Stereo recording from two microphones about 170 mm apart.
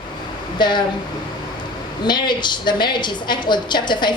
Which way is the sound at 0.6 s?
25° left (ahead or behind).